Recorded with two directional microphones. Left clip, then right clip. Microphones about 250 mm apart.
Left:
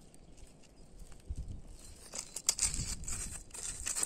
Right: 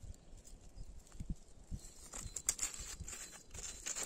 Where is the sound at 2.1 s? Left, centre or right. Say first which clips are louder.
Left 6 dB; left.